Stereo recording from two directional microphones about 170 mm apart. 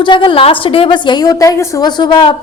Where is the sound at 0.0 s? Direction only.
30° left (ahead or behind).